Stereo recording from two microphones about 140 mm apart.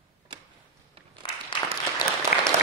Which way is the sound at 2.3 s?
80° left.